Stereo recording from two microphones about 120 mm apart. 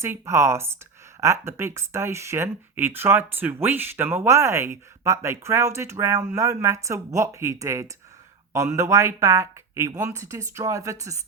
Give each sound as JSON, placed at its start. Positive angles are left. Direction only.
{"t": 0.0, "sound": "speech", "side_deg": -25}